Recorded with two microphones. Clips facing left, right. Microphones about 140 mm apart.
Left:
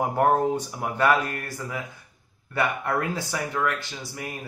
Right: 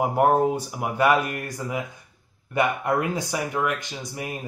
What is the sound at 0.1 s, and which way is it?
Speech, 10° right (ahead or behind).